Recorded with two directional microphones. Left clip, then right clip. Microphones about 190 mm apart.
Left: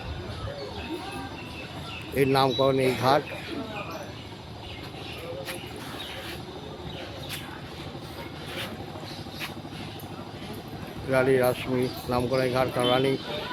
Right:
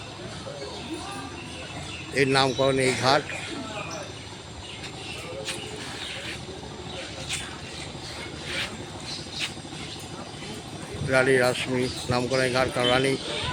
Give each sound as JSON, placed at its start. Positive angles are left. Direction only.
{"t": 2.1, "sound": "speech", "side_deg": 5}
{"t": 11.1, "sound": "speech", "side_deg": 0}